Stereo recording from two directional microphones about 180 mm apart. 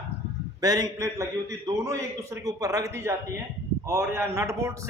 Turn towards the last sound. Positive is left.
turn(degrees=-15)  # may be behind; listen again after turning